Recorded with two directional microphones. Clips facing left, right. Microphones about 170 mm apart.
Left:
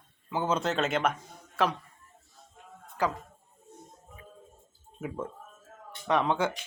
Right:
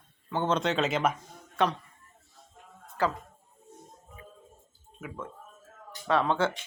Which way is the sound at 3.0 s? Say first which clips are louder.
Right 1 dB; 15° left (ahead or behind).